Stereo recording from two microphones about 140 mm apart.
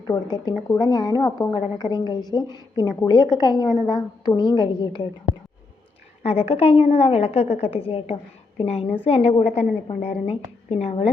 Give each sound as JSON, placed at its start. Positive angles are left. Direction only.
{"t": 0.8, "sound": "a woman's voice", "side_deg": 30}
{"t": 6.2, "sound": "a woman's voice", "side_deg": 45}